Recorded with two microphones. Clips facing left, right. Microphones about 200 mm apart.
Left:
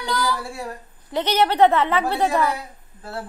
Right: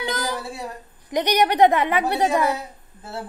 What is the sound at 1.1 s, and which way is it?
A woman's voice, 15° right (ahead or behind).